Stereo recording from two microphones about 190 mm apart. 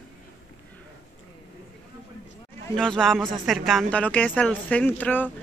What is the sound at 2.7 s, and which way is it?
Speech, 5° left (ahead or behind).